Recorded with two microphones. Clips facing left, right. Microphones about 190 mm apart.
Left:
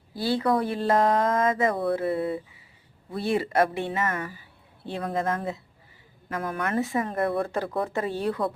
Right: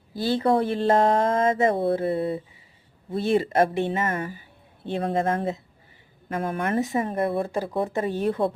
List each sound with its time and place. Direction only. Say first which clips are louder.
0.2 s speech: right 2 dB; 25° right (ahead or behind)
7.5 s speech: right 2 dB; 15° right (ahead or behind)